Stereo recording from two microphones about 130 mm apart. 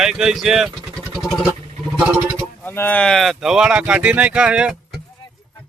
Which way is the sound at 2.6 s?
15° left (ahead or behind).